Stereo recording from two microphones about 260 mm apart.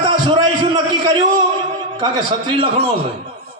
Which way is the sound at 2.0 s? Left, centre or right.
Centre.